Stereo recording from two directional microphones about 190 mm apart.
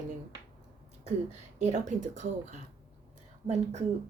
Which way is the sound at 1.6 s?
40° right (ahead or behind).